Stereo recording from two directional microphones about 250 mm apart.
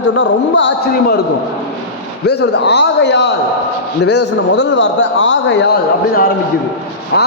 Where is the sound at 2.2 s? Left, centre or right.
Left.